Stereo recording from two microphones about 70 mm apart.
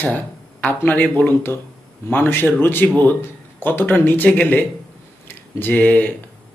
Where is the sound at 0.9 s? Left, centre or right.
Left.